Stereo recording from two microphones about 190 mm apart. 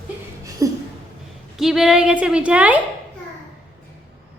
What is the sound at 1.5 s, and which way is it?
A woman's voice, centre (ahead or behind).